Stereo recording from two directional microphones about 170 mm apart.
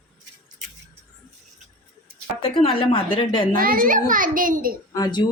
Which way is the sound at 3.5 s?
55° right (ahead or behind).